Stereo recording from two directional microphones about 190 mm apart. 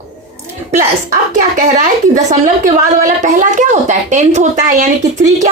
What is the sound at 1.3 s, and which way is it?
A woman's voice, 40° right (ahead or behind).